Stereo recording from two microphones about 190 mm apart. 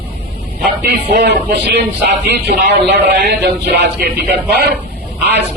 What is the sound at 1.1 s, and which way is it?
Speech, 60° right (ahead or behind).